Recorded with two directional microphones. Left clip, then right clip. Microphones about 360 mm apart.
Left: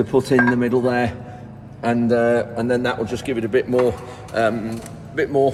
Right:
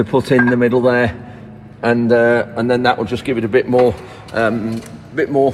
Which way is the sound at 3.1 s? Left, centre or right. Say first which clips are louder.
Right 5 dB; centre.